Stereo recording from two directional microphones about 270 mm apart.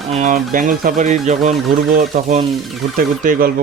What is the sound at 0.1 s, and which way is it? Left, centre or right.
A man's voice, right.